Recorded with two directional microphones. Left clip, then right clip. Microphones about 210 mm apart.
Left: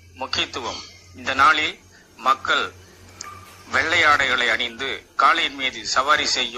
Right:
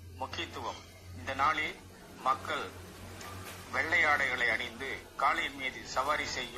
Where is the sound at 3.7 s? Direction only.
45° left (ahead or behind).